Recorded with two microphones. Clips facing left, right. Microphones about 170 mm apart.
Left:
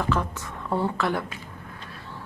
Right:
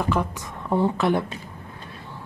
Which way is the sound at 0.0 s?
15° right (ahead or behind).